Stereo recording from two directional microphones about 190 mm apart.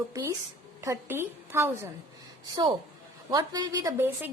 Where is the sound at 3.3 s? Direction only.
20° right (ahead or behind).